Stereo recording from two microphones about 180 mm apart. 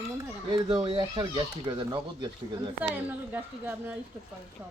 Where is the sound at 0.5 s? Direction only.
25° right (ahead or behind).